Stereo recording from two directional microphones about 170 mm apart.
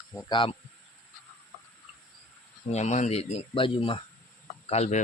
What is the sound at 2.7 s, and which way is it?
Speech, 40° left (ahead or behind).